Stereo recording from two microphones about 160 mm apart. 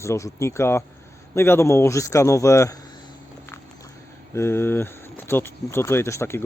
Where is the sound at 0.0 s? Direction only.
20° left (ahead or behind).